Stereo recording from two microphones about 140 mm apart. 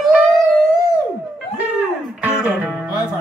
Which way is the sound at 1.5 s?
10° right (ahead or behind).